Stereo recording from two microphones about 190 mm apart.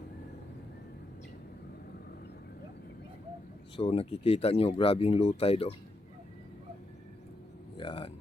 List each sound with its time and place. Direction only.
3.8 s speech: 30° left (ahead or behind)
7.8 s speech: 30° left (ahead or behind)